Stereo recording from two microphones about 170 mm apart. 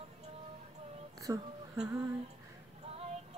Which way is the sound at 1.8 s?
20° right (ahead or behind).